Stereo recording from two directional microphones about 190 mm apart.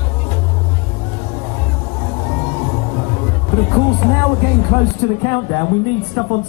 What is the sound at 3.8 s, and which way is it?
Speech, 20° left (ahead or behind).